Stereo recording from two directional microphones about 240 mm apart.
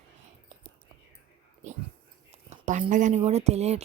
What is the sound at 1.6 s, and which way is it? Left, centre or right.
Speech, right.